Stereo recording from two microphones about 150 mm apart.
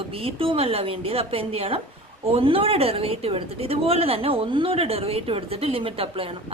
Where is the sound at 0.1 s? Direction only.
40° right (ahead or behind).